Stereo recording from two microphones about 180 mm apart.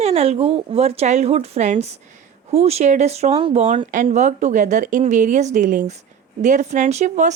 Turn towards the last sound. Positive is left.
turn(degrees=-40)  # may be behind; listen again after turning